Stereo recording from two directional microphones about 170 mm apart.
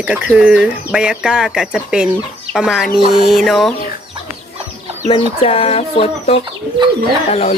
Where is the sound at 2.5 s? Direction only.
Centre (ahead or behind).